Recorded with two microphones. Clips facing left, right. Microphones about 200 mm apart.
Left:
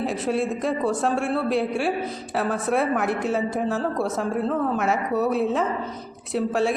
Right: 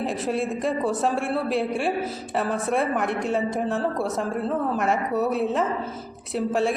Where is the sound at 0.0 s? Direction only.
Centre (ahead or behind).